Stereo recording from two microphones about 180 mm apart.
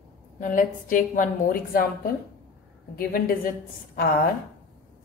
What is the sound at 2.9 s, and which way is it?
A woman's voice, 55° left (ahead or behind).